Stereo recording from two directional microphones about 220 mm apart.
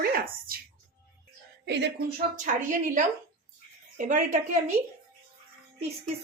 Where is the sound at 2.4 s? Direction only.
35° right (ahead or behind).